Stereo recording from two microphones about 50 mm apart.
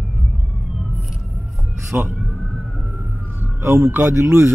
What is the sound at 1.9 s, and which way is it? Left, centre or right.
Speech, right.